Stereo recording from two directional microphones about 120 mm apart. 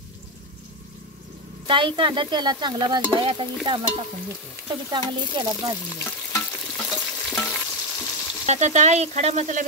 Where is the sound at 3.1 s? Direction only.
40° right (ahead or behind).